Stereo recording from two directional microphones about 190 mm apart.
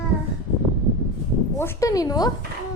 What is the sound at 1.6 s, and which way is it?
Speech, 15° left (ahead or behind).